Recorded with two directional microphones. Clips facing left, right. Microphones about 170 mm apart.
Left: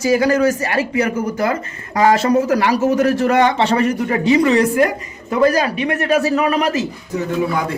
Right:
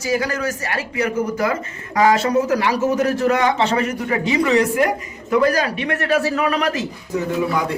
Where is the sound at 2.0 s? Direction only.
35° left (ahead or behind).